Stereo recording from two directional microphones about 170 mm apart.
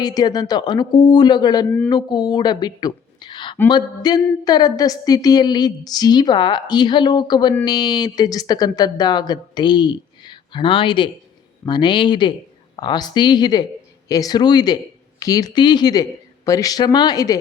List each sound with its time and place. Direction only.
0.0 s a woman's voice: 25° left (ahead or behind)